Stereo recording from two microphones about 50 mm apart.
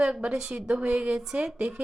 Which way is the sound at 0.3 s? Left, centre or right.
Centre.